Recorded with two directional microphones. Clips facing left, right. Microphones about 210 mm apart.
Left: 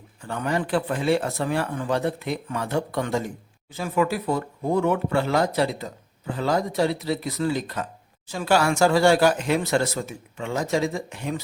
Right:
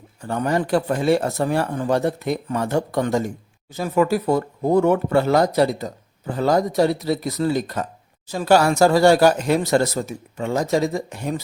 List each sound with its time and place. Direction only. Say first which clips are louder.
0.2 s speech: right 5 dB; 40° right (ahead or behind)